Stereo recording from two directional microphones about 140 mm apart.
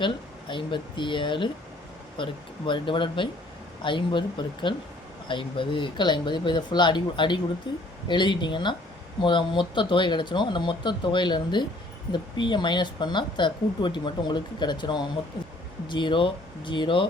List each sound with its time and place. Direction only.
0.0 s speech: 35° left (ahead or behind)